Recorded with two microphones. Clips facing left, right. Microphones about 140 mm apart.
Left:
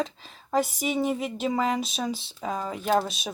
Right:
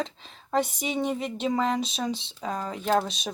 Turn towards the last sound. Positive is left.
turn(degrees=5)  # may be behind; listen again after turning